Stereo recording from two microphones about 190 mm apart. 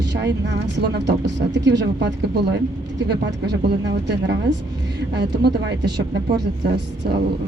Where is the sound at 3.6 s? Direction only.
65° right (ahead or behind).